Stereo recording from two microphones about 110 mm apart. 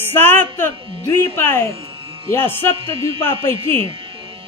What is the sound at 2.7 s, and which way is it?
Music, 55° right (ahead or behind).